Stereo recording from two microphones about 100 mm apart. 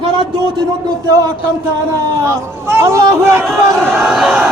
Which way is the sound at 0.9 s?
35° right (ahead or behind).